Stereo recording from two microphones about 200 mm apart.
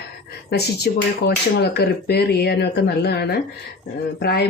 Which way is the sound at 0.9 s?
50° left (ahead or behind).